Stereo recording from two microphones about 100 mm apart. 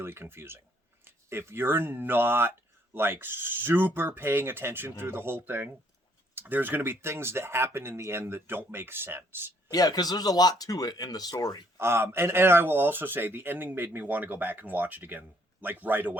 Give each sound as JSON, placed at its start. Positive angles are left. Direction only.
{"t": 0.0, "sound": "speech", "side_deg": -25}
{"t": 9.6, "sound": "speech", "side_deg": 40}
{"t": 11.8, "sound": "speech", "side_deg": -25}